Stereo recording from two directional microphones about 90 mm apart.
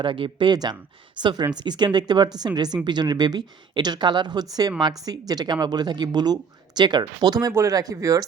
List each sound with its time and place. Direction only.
0.0 s speech: 65° right (ahead or behind); by 7.5 s 45° right (ahead or behind)
7.5 s speech: 35° right (ahead or behind)